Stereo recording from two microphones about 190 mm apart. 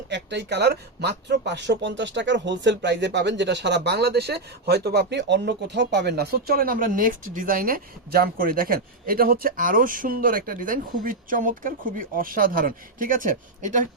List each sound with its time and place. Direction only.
0.1 s speech: 65° right (ahead or behind); by 13.8 s 40° right (ahead or behind)